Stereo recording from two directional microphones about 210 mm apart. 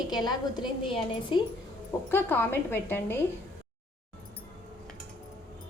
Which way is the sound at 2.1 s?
10° left (ahead or behind).